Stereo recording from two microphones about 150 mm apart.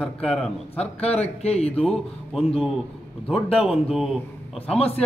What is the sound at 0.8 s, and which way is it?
Speech, 45° left (ahead or behind).